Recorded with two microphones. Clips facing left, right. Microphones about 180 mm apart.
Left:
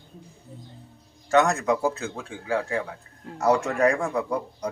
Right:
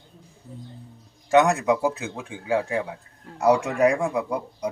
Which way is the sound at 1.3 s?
15° right (ahead or behind).